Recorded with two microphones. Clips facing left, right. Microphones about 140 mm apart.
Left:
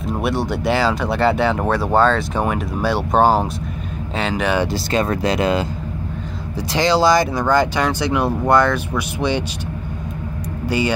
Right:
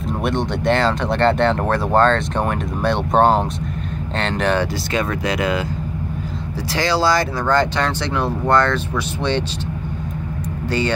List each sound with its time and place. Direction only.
0.2 s speech: 5° left (ahead or behind)
4.9 s speech: 30° left (ahead or behind)
6.7 s speech: 20° left (ahead or behind)